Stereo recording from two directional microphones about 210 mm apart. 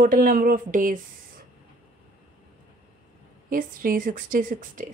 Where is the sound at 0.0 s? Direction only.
40° right (ahead or behind).